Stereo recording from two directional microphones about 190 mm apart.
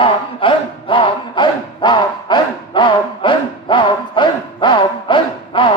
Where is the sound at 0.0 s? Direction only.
25° left (ahead or behind).